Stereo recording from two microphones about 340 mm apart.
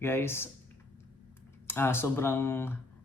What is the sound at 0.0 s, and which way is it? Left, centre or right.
Speech, centre.